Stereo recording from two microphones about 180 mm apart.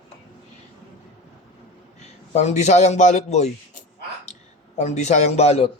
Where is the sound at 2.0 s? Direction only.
40° left (ahead or behind).